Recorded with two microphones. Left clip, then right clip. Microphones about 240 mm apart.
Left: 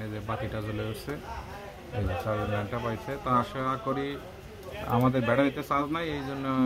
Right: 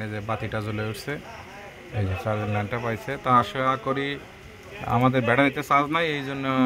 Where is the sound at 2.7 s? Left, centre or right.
Right.